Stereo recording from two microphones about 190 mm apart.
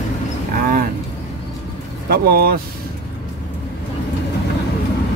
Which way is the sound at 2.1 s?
55° right (ahead or behind).